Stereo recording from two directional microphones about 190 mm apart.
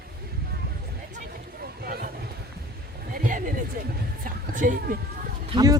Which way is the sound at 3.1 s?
45° right (ahead or behind).